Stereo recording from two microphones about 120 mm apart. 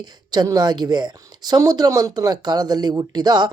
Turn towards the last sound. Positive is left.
turn(degrees=-35)  # may be behind; listen again after turning